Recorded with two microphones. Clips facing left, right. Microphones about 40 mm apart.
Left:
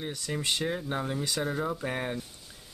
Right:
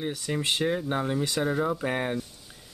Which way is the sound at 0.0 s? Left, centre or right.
Centre.